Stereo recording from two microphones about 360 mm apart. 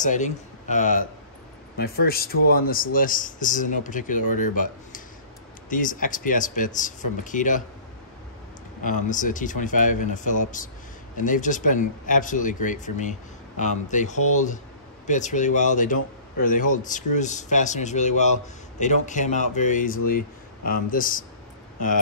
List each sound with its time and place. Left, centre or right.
0.0 s a man's voice: left
8.8 s a man's voice: left